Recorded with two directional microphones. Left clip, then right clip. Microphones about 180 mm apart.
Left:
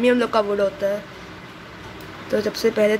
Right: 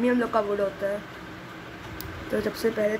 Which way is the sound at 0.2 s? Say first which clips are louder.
Left 5 dB; 5° left (ahead or behind).